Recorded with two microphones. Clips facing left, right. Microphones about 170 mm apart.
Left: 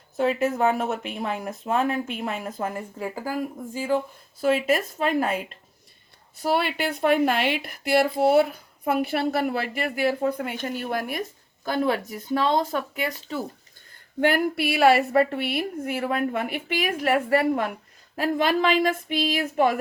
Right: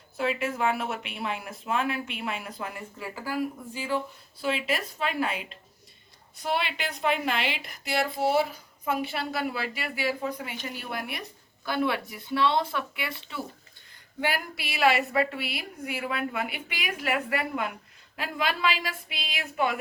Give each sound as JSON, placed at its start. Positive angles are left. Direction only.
{"t": 0.2, "sound": "speech", "side_deg": 40}
{"t": 14.2, "sound": "speech", "side_deg": 55}